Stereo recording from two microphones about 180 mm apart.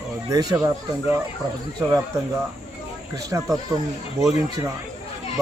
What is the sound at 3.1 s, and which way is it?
Speech, 20° right (ahead or behind).